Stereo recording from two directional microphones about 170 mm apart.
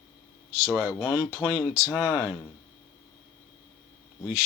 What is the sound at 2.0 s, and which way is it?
Speech, 15° left (ahead or behind).